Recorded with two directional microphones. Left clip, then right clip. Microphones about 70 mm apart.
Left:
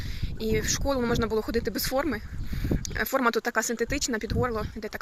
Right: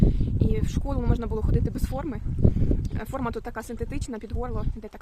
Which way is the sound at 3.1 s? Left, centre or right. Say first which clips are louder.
Left 7 dB; centre.